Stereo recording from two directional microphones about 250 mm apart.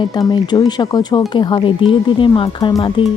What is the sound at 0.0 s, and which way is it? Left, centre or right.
Speech, centre.